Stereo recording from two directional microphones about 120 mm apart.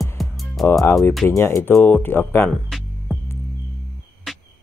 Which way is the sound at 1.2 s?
20° left (ahead or behind).